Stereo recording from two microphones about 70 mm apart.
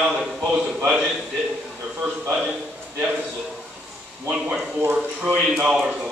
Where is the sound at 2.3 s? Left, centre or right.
Centre.